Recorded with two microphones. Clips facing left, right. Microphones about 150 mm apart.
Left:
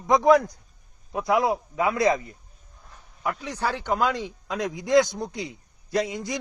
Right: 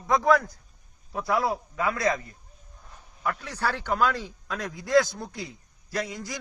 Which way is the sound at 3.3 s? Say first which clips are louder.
Left 2 dB; 10° left (ahead or behind).